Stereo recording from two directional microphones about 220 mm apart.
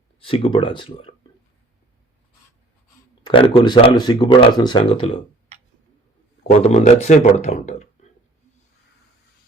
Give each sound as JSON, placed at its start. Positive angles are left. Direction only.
{"t": 0.2, "sound": "speech", "side_deg": 25}
{"t": 3.2, "sound": "speech", "side_deg": 25}
{"t": 6.5, "sound": "speech", "side_deg": 30}